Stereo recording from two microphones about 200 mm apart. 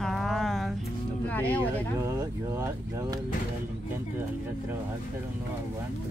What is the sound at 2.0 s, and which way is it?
Speech, 15° right (ahead or behind).